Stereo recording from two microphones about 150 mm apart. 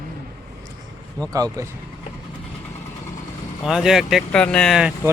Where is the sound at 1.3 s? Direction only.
25° right (ahead or behind).